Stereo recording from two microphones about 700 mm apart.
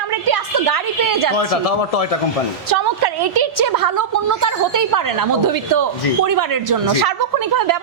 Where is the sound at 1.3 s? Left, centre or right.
Left.